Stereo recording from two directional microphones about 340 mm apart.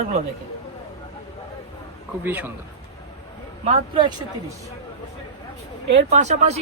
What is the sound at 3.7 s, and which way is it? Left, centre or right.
Speech, centre.